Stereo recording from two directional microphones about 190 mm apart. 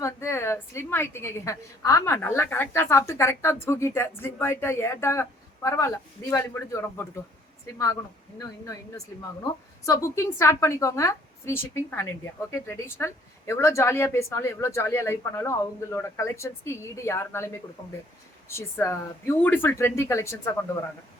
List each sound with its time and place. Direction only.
0.0 s a woman's voice: 15° left (ahead or behind)
8.4 s a woman's voice: 15° left (ahead or behind)